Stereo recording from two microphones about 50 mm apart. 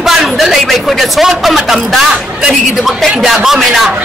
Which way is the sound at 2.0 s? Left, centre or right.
Centre.